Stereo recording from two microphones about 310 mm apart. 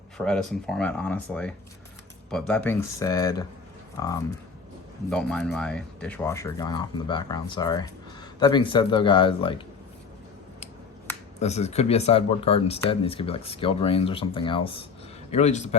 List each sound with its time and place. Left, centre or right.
0.2 s speech: centre
5.1 s speech: centre
11.3 s speech: left